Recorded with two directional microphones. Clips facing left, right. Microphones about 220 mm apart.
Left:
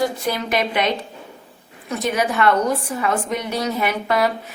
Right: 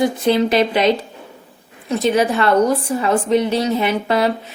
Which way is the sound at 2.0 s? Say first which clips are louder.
Right 4 dB; 30° right (ahead or behind).